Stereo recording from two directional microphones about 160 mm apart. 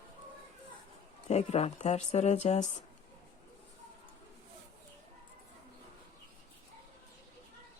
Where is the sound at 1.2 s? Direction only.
45° left (ahead or behind).